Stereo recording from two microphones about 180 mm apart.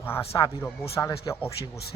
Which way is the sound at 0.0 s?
15° left (ahead or behind).